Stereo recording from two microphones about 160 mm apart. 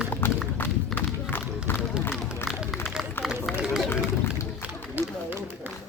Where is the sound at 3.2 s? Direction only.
15° left (ahead or behind).